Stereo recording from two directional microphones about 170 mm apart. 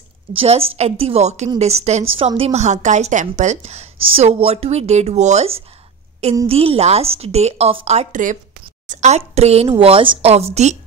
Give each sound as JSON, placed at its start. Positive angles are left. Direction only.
{"t": 0.3, "sound": "a woman's voice", "side_deg": -35}